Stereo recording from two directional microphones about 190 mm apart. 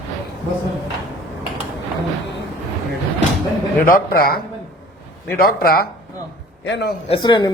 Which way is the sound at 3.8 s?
50° left (ahead or behind).